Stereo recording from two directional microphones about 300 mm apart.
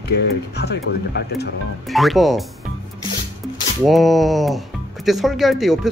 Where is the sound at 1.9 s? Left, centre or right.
Centre.